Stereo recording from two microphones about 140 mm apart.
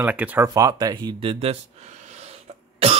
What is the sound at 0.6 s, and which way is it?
Speech, 25° right (ahead or behind).